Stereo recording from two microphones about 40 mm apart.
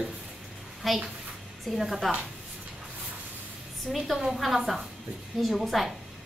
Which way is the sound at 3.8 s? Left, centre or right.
Centre.